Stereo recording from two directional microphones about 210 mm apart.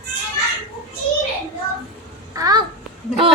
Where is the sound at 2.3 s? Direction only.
15° right (ahead or behind).